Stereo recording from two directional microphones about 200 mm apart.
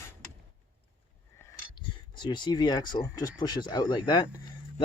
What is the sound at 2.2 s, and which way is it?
Speech, 20° left (ahead or behind).